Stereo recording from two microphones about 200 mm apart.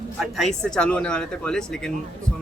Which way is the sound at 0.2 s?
Centre (ahead or behind).